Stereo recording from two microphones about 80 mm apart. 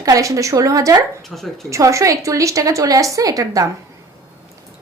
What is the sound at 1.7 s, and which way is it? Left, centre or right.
Speech, right.